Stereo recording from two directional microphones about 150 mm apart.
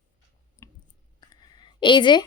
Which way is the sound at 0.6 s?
20° left (ahead or behind).